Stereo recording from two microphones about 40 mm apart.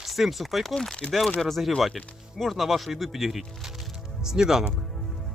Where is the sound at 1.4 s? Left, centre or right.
Centre.